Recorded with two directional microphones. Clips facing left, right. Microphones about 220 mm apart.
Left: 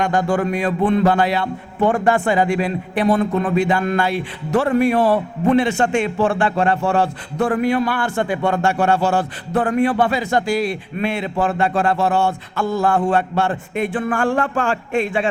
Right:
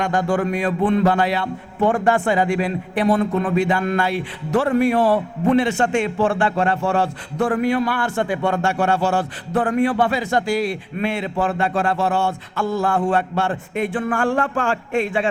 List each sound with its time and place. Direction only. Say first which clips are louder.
0.0 s a man's voice: left 1 dB; 15° left (ahead or behind)